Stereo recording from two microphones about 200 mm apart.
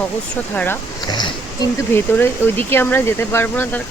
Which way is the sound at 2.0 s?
10° left (ahead or behind).